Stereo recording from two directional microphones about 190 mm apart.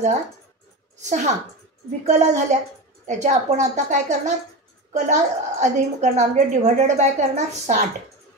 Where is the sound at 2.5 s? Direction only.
40° right (ahead or behind).